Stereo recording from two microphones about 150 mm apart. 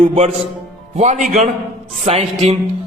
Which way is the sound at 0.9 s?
55° right (ahead or behind).